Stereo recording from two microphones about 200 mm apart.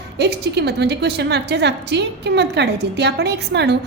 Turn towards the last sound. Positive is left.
turn(degrees=-60)  # may be behind; listen again after turning